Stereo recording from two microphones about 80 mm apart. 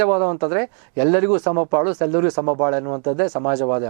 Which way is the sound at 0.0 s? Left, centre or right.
Centre.